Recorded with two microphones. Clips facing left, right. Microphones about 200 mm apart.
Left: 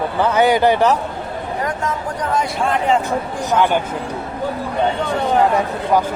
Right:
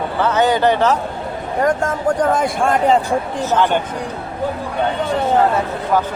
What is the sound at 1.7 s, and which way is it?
Speech, 50° right (ahead or behind).